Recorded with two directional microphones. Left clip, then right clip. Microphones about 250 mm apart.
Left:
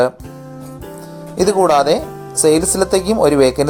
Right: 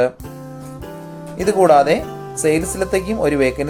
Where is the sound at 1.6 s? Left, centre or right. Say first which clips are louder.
Right 2 dB; centre.